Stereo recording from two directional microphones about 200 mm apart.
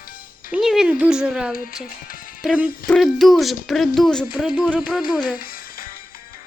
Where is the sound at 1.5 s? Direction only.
45° left (ahead or behind).